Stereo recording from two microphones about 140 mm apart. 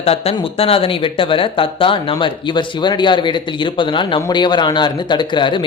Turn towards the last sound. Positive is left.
turn(degrees=35)  # may be behind; listen again after turning